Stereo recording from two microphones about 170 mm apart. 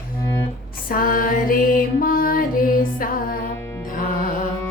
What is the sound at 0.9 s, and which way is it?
Music, 55° left (ahead or behind).